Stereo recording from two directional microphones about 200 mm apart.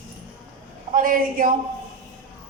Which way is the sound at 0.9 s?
45° right (ahead or behind).